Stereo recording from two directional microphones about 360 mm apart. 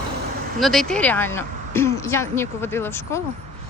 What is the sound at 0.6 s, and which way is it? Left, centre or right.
A woman's voice, centre.